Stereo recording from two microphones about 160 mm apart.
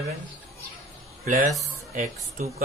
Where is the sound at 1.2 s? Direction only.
60° right (ahead or behind).